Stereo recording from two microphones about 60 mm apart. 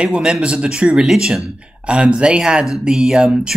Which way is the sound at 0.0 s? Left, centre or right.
Centre.